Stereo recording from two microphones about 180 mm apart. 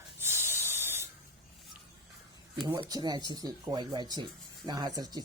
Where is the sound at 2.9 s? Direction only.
25° right (ahead or behind).